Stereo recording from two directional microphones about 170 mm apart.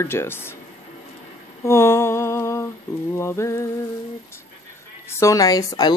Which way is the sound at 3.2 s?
15° left (ahead or behind).